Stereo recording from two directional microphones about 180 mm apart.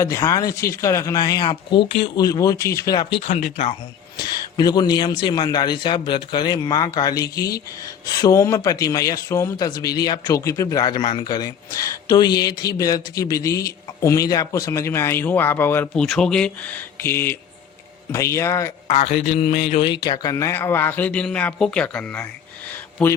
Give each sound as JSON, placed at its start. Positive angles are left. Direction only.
{"t": 0.0, "sound": "speech", "side_deg": 15}
{"t": 4.5, "sound": "a man's voice", "side_deg": 20}
{"t": 18.9, "sound": "a man's voice", "side_deg": 40}
{"t": 19.8, "sound": "a man's voice", "side_deg": 25}